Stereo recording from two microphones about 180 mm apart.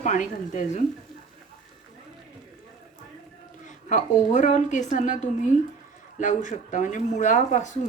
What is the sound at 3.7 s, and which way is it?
A woman's voice, 40° left (ahead or behind).